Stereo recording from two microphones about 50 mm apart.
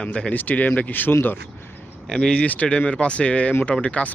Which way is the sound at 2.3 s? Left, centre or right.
Left.